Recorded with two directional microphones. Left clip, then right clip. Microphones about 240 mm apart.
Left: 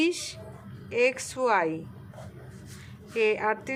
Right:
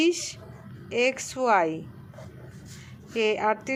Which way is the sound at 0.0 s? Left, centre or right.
Right.